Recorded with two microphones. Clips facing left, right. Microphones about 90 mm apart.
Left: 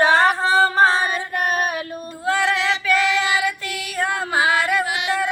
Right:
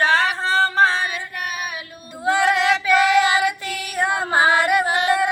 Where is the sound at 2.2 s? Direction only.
15° right (ahead or behind).